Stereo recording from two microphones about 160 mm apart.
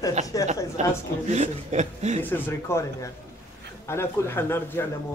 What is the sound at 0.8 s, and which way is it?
Speech, 45° right (ahead or behind).